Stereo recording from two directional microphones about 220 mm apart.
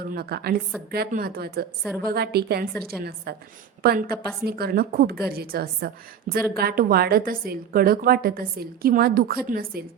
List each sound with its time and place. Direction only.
0.0 s a woman's voice: 45° right (ahead or behind)